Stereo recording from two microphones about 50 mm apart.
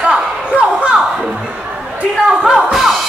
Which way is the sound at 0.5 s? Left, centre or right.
Right.